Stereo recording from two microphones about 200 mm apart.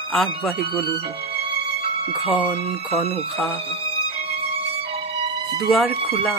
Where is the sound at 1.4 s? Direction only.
30° right (ahead or behind).